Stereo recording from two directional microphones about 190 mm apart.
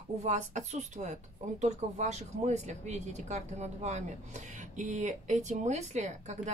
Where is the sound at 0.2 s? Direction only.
35° right (ahead or behind).